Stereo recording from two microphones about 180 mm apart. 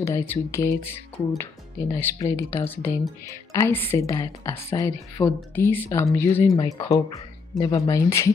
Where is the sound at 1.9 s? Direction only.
15° left (ahead or behind).